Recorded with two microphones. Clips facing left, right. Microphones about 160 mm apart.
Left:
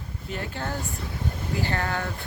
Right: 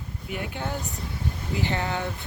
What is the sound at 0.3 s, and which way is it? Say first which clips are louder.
Speech: even; 15° right (ahead or behind).